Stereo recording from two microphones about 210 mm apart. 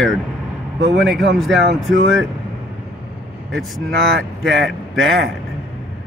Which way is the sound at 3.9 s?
55° right (ahead or behind).